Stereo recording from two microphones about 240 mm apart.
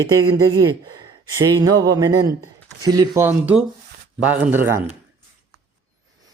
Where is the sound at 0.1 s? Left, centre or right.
Centre.